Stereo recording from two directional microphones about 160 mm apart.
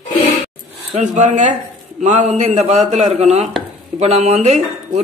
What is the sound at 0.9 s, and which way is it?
A man's voice, 45° right (ahead or behind).